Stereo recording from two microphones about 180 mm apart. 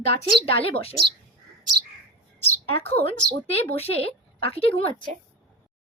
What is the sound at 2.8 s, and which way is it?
A woman's voice, 35° left (ahead or behind).